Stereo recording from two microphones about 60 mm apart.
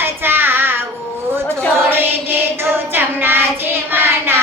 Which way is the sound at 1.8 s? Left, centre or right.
Right.